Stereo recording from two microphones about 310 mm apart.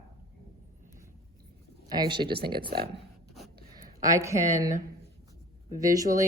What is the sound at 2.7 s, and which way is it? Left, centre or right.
Speech, right.